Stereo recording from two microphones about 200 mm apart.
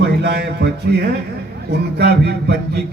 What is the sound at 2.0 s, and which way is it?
Speech, 55° right (ahead or behind).